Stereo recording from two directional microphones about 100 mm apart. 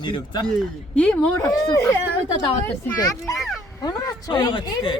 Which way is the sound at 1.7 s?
25° left (ahead or behind).